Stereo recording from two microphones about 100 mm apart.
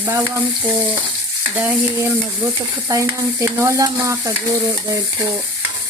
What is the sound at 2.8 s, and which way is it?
Stir, 30° right (ahead or behind).